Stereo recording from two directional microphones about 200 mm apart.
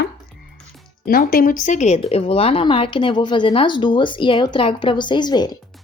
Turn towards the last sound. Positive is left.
turn(degrees=20)  # may be behind; listen again after turning